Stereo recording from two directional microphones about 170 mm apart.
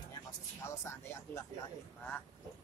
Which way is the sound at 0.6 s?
15° left (ahead or behind).